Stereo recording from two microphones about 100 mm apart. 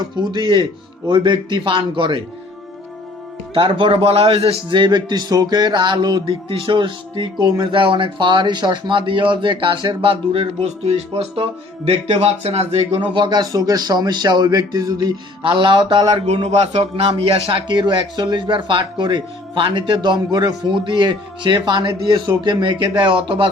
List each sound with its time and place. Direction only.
0.2 s a man's voice: 45° right (ahead or behind)
3.5 s a man's voice: 60° right (ahead or behind)
6.2 s a man's voice: 60° right (ahead or behind)
7.7 s a man's voice: 60° right (ahead or behind); by 13.0 s 90° right
13.1 s a man's voice: 50° right (ahead or behind)
15.4 s a man's voice: 55° right (ahead or behind)
16.2 s a man's voice: 90° right; by 23.5 s 60° right (ahead or behind)